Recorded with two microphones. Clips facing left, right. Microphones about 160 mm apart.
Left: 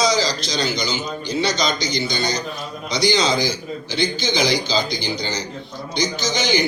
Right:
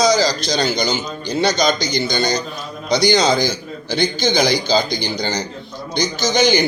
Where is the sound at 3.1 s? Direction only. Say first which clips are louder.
Right 4 dB; 45° right (ahead or behind).